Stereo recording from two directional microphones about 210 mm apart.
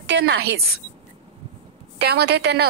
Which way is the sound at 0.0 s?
55° right (ahead or behind).